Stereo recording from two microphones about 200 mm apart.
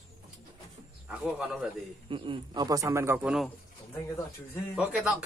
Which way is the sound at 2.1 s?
25° right (ahead or behind).